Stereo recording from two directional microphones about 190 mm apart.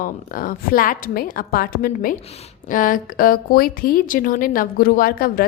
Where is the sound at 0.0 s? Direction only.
45° left (ahead or behind).